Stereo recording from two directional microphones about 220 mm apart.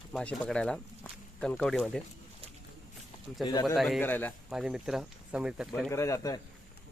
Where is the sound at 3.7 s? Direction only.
Centre (ahead or behind).